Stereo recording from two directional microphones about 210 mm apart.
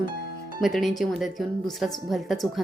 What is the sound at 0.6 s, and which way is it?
Speech, centre (ahead or behind).